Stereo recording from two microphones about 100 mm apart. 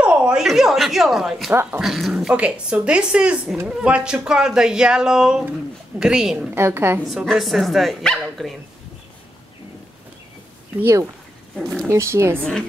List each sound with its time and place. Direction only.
0.0 s speech: 10° right (ahead or behind)
1.5 s speech: 20° right (ahead or behind)
1.8 s speech: 5° right (ahead or behind)
6.5 s speech: 25° right (ahead or behind)
7.1 s speech: 5° right (ahead or behind)
10.8 s speech: 30° right (ahead or behind)
11.5 s speech: 5° left (ahead or behind)
11.9 s speech: 30° right (ahead or behind)